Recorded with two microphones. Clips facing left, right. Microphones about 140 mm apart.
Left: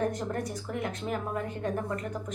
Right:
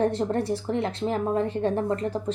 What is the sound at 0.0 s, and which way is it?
A woman's voice, 30° right (ahead or behind).